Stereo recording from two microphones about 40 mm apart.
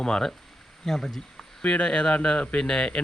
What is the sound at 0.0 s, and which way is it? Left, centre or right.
Speech, centre.